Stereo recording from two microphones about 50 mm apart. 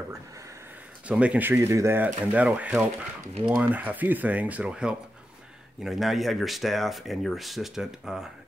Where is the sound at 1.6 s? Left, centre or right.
Right.